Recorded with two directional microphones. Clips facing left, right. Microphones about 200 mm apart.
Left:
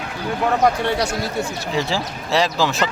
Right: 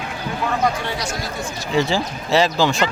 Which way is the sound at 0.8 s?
60° left (ahead or behind).